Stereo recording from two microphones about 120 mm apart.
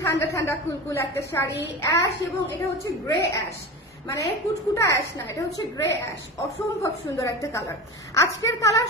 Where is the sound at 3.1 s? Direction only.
30° left (ahead or behind).